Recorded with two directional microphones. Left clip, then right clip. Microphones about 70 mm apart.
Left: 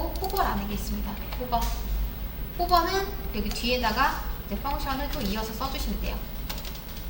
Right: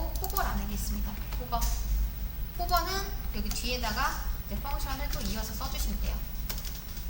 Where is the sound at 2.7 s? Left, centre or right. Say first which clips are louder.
Left 7 dB; right.